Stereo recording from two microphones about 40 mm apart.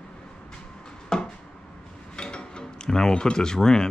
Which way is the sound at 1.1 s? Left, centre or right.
Centre.